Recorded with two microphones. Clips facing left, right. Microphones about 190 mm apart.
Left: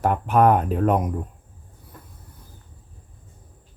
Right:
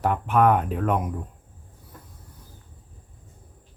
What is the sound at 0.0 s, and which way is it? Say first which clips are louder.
Speech: left 2 dB; 40° left (ahead or behind).